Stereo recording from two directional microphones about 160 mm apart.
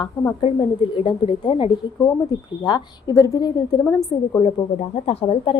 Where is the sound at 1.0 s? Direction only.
35° left (ahead or behind); by 4.4 s 15° left (ahead or behind).